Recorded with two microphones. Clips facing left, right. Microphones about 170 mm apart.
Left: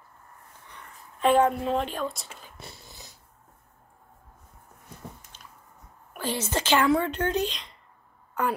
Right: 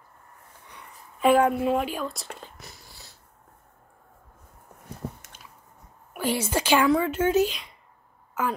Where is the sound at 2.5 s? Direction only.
25° left (ahead or behind).